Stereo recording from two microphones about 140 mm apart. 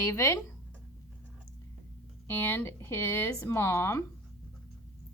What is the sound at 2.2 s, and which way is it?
Speech, 15° left (ahead or behind).